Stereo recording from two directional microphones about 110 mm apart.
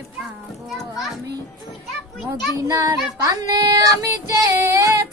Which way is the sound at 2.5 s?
30° right (ahead or behind).